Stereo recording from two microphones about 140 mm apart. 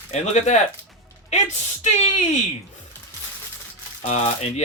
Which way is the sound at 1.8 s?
55° left (ahead or behind).